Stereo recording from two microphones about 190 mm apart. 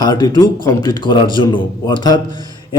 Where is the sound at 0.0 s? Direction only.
20° left (ahead or behind).